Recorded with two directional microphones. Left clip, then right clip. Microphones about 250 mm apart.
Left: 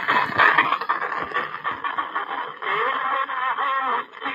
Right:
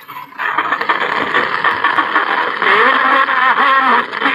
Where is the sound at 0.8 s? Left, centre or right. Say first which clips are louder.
Right 9 dB; right.